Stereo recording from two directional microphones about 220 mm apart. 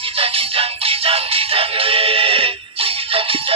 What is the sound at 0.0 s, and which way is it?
Music, 25° right (ahead or behind).